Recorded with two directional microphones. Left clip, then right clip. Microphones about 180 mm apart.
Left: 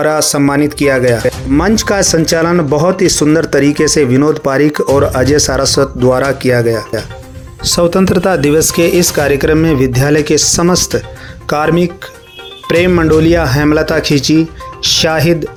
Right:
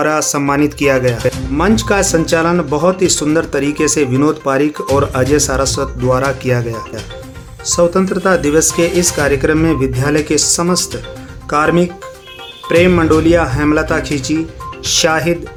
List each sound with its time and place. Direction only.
0.0 s speech: 25° left (ahead or behind)
1.5 s speech: 30° left (ahead or behind)
7.6 s speech: 35° left (ahead or behind)